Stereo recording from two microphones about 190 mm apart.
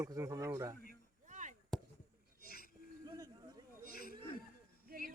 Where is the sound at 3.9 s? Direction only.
50° left (ahead or behind).